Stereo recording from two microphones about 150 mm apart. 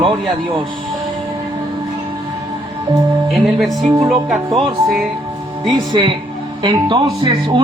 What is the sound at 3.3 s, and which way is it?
Speech, centre (ahead or behind).